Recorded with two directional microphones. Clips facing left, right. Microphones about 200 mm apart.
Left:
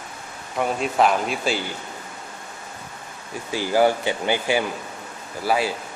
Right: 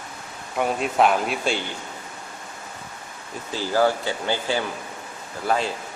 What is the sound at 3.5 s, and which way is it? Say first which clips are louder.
A man's voice: left 2 dB; 15° left (ahead or behind).